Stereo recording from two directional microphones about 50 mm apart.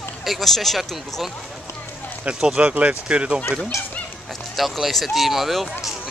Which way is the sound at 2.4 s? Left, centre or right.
Right.